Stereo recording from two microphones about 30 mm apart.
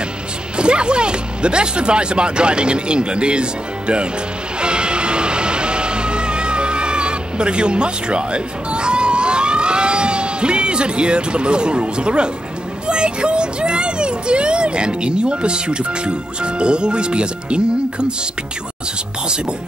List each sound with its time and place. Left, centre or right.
0.6 s speech: right
4.6 s music: right
12.8 s speech: right